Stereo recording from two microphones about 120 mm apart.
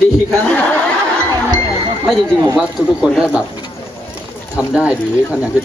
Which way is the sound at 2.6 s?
5° right (ahead or behind).